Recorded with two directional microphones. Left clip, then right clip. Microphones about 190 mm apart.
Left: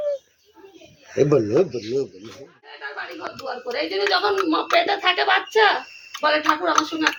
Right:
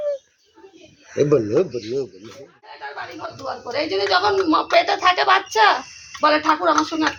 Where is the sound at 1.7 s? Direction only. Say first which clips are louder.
Even; 20° left (ahead or behind).